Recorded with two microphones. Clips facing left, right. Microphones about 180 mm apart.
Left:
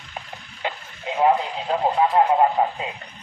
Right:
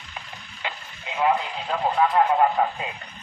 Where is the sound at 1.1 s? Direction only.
40° left (ahead or behind).